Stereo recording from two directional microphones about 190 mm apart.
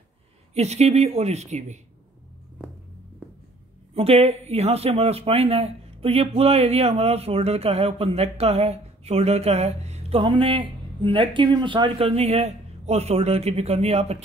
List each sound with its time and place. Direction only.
0.6 s speech: 35° right (ahead or behind)
3.9 s speech: 30° right (ahead or behind)